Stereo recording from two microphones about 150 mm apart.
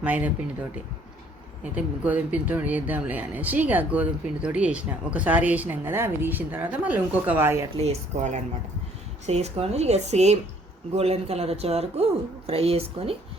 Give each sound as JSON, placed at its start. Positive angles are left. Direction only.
{"t": 0.0, "sound": "speech", "side_deg": -10}
{"t": 1.7, "sound": "speech", "side_deg": -10}
{"t": 7.8, "sound": "speech", "side_deg": -50}